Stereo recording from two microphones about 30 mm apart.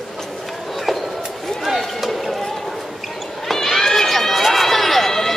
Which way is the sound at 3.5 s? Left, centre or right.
Centre.